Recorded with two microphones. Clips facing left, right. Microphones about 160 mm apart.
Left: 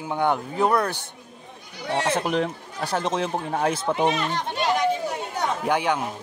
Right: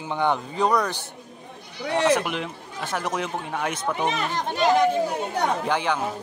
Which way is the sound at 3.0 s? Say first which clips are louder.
Left 3 dB; 30° left (ahead or behind).